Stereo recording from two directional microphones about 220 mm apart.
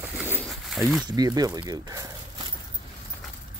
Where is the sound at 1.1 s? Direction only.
15° right (ahead or behind).